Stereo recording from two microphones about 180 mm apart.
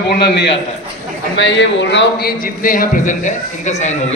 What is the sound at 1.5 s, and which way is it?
Speech, 85° left.